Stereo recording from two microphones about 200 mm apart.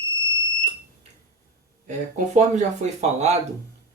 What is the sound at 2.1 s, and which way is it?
Speech, 35° right (ahead or behind).